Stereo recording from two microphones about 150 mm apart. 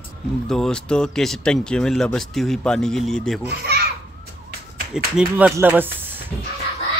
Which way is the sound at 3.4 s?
90° right.